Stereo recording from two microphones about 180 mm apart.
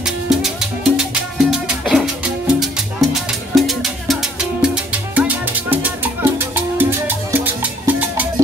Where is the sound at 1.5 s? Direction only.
Centre (ahead or behind).